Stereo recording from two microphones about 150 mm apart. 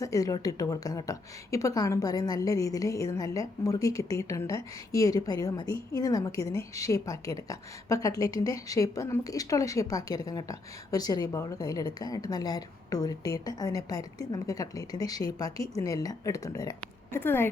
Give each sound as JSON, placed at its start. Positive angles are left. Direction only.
{"t": 0.0, "sound": "a woman's voice", "side_deg": 25}